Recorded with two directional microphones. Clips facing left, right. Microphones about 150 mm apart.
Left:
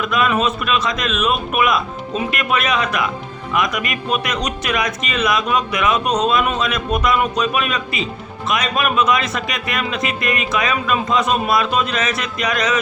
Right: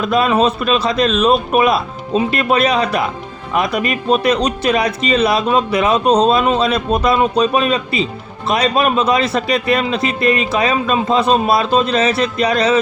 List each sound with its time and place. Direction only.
0.0 s speech: 30° right (ahead or behind)